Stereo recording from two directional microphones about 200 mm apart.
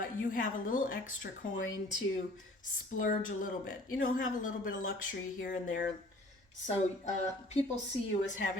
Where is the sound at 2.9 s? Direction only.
40° left (ahead or behind).